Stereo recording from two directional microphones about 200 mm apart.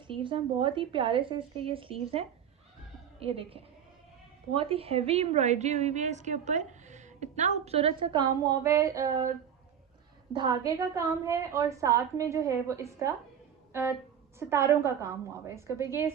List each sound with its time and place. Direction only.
0.1 s a woman's voice: 25° right (ahead or behind)
10.3 s a woman's voice: 20° right (ahead or behind)